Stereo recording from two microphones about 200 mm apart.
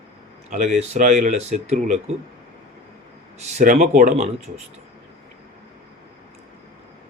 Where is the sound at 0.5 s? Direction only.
35° right (ahead or behind).